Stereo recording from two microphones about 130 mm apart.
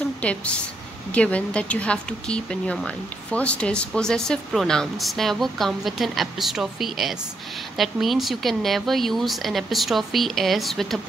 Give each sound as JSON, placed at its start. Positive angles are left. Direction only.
{"t": 0.2, "sound": "a woman's voice", "side_deg": 10}